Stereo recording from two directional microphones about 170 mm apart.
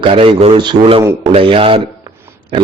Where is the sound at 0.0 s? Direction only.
30° right (ahead or behind).